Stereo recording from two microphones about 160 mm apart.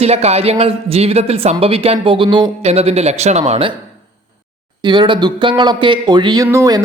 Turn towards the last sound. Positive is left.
turn(degrees=-20)  # may be behind; listen again after turning